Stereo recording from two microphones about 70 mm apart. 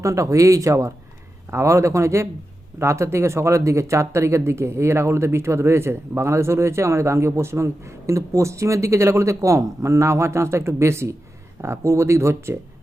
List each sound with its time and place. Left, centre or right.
0.0 s speech: right